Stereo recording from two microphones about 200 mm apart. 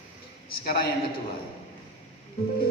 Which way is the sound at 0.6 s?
50° left (ahead or behind).